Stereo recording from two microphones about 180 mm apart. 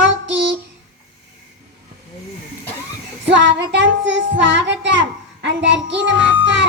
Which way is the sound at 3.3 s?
80° right.